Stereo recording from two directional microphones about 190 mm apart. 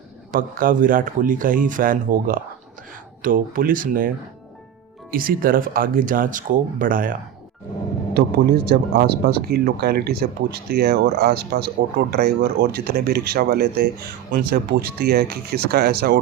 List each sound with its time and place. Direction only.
0.3 s speech: 45° right (ahead or behind)
5.1 s speech: 50° right (ahead or behind)
8.1 s speech: 55° right (ahead or behind)